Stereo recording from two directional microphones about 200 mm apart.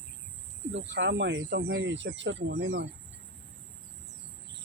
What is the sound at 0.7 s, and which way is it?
Speech, 65° right (ahead or behind).